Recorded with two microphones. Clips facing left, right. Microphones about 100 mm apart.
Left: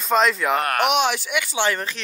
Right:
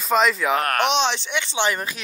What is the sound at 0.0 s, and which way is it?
Speech, centre (ahead or behind).